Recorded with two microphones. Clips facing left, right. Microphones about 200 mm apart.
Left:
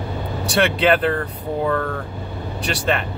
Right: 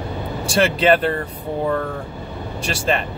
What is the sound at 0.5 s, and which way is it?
Speech, centre (ahead or behind).